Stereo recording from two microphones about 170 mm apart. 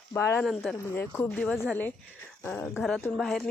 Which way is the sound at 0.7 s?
5° left (ahead or behind).